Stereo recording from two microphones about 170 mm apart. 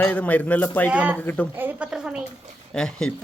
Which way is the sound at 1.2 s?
10° left (ahead or behind).